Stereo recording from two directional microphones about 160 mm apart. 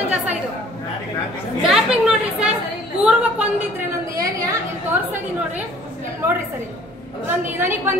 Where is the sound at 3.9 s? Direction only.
20° right (ahead or behind).